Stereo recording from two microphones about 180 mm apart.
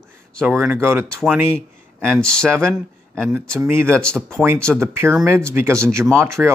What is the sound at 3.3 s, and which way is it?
Speech, 10° right (ahead or behind).